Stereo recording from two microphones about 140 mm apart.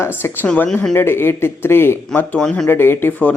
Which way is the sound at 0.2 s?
10° left (ahead or behind).